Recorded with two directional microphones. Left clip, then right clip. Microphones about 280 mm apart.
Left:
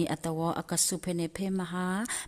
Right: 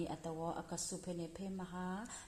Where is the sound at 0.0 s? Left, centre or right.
Left.